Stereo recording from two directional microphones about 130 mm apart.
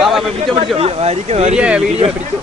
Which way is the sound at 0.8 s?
50° right (ahead or behind).